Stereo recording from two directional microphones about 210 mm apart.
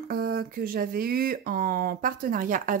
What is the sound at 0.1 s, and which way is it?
Speech, 45° right (ahead or behind).